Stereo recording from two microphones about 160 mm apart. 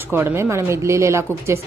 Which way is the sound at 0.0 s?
15° right (ahead or behind).